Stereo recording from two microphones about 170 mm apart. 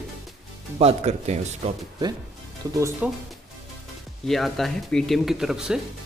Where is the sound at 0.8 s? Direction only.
35° right (ahead or behind).